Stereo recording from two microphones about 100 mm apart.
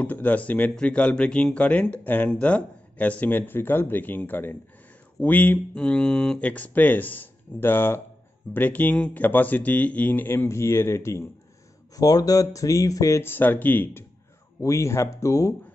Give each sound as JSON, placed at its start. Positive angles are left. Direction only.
{"t": 0.0, "sound": "speech", "side_deg": 15}
{"t": 12.0, "sound": "speech", "side_deg": 40}
{"t": 13.2, "sound": "speech", "side_deg": 20}
{"t": 14.6, "sound": "speech", "side_deg": 30}